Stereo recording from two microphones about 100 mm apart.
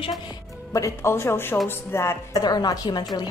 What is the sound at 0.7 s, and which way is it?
Speech, 30° left (ahead or behind).